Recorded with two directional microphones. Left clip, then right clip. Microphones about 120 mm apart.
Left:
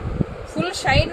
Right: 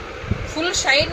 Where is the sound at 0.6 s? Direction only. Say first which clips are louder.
Right 2 dB; 20° left (ahead or behind).